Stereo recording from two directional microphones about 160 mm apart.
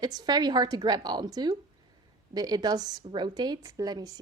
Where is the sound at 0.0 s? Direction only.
25° right (ahead or behind).